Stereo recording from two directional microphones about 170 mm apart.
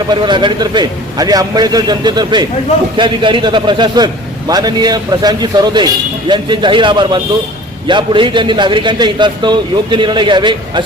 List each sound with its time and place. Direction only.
0.1 s a man's voice: 25° right (ahead or behind)